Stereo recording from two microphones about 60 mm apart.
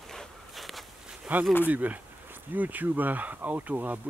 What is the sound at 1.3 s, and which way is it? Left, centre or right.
Speech, right.